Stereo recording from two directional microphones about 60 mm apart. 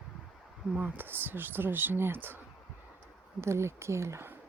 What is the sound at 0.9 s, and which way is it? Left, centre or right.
Speech, right.